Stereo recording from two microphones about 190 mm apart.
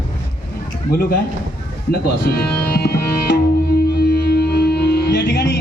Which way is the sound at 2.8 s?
55° left (ahead or behind).